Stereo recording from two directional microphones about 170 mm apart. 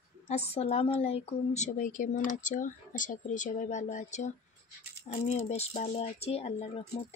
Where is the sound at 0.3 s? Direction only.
40° left (ahead or behind).